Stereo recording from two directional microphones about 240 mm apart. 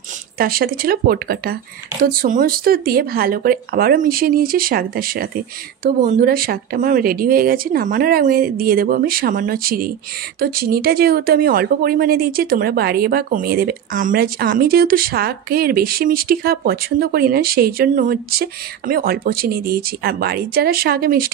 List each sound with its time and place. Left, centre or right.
0.4 s speech: right